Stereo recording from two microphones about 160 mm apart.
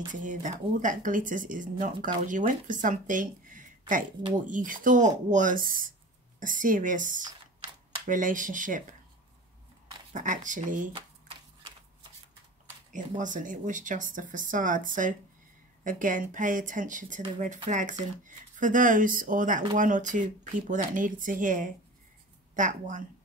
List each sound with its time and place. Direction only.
0.1 s speech: 55° right (ahead or behind)
10.1 s speech: 55° right (ahead or behind)
10.9 s a sound: 35° right (ahead or behind)
13.2 s speech: 55° right (ahead or behind)